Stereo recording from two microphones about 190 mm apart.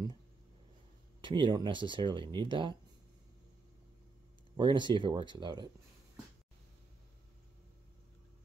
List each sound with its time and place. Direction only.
1.2 s speech: 25° right (ahead or behind)
4.6 s speech: 25° right (ahead or behind)